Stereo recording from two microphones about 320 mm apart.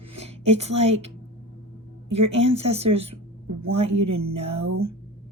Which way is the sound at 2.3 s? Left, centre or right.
Centre.